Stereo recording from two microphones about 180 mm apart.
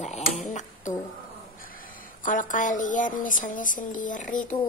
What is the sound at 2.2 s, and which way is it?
A woman's voice, 45° left (ahead or behind).